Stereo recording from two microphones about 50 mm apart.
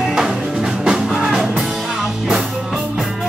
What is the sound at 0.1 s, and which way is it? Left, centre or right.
Music, centre.